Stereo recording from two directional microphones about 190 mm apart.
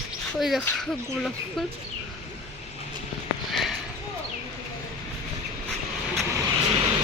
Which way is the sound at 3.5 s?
Centre (ahead or behind).